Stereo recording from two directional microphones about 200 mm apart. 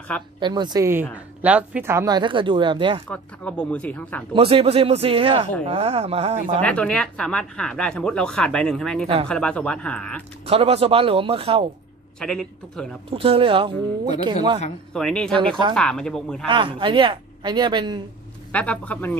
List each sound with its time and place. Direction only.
0.4 s speech: 20° right (ahead or behind)
3.1 s speech: 5° left (ahead or behind)
4.3 s speech: 30° right (ahead or behind)
6.6 s speech: 5° left (ahead or behind)
9.0 s speech: 25° right (ahead or behind)
9.3 s speech: 5° left (ahead or behind)
10.4 s speech: 30° right (ahead or behind)
12.2 s speech: 5° left (ahead or behind)
13.1 s speech: 25° right (ahead or behind)
15.0 s speech: 5° left (ahead or behind)
16.4 s speech: 25° right (ahead or behind)
18.5 s speech: 5° left (ahead or behind)